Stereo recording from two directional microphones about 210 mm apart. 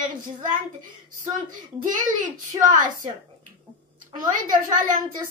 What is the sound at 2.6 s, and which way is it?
Speech, 40° right (ahead or behind).